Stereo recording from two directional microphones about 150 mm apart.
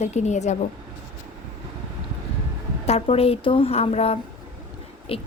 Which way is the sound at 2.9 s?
40° left (ahead or behind).